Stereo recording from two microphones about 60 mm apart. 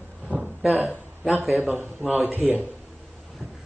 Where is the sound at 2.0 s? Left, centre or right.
Right.